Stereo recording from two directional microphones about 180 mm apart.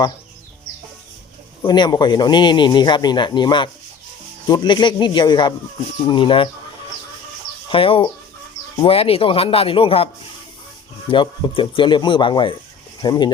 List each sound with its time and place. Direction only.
1.6 s speech: 25° left (ahead or behind)
7.7 s speech: 30° left (ahead or behind)
11.1 s speech: 30° left (ahead or behind)